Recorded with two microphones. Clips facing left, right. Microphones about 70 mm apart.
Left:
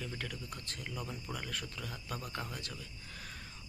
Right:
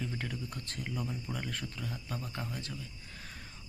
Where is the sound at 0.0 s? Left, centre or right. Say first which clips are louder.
Right 4 dB; right.